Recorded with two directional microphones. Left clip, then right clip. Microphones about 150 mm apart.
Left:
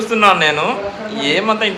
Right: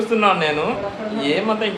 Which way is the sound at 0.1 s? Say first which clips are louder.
Left 6 dB; 25° left (ahead or behind).